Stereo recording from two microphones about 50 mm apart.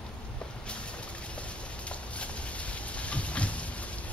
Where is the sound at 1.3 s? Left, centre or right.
Left.